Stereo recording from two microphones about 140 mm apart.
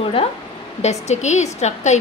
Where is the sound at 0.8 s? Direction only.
55° left (ahead or behind).